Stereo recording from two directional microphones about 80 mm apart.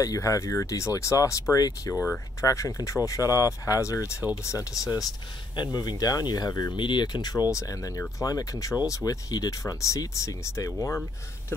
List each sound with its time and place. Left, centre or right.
0.0 s speech: left
6.8 s speech: left